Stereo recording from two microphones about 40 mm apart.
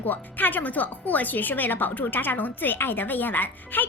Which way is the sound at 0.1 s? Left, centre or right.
Left.